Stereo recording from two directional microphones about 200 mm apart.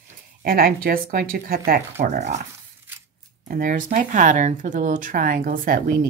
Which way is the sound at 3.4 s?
40° right (ahead or behind).